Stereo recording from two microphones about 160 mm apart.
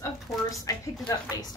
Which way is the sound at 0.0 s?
20° left (ahead or behind).